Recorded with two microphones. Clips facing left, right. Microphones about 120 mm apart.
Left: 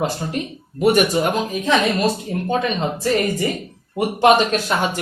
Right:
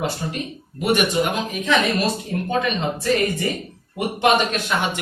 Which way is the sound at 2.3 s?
25° left (ahead or behind).